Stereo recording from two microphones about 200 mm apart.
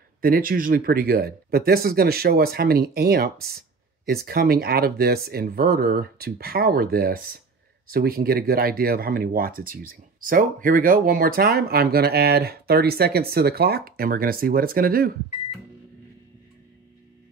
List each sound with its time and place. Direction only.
0.2 s speech: 45° right (ahead or behind)